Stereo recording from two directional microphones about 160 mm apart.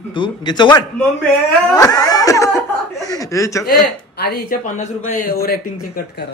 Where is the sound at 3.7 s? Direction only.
70° left (ahead or behind).